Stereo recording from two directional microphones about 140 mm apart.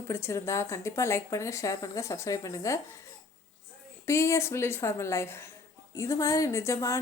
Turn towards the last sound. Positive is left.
turn(degrees=20)  # may be behind; listen again after turning